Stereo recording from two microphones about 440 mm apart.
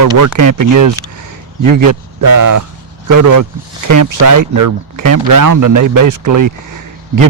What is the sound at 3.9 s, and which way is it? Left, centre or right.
Speech, right.